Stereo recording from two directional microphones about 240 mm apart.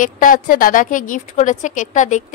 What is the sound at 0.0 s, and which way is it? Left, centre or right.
Speech, left.